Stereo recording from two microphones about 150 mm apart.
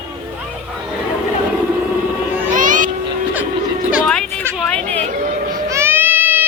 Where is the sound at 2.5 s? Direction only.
60° right (ahead or behind).